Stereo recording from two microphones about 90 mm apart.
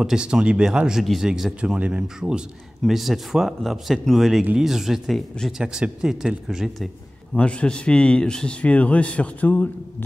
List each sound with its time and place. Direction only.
0.0 s speech: 5° right (ahead or behind)
5.8 s speech: 10° right (ahead or behind)
7.3 s a man's voice: 10° left (ahead or behind)